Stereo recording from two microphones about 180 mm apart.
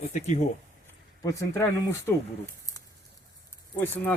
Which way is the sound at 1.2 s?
20° left (ahead or behind).